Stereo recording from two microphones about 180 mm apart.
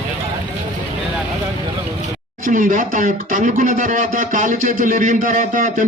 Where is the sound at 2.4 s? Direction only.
50° right (ahead or behind).